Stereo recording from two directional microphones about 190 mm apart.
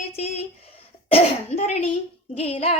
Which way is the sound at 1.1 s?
35° left (ahead or behind).